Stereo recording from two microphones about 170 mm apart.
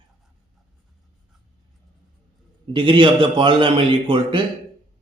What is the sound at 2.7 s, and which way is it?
A man's voice, 30° right (ahead or behind).